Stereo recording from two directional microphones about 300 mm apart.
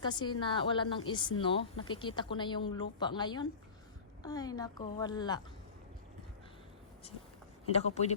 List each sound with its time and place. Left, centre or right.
0.0 s a woman's voice: centre
7.7 s a man's voice: left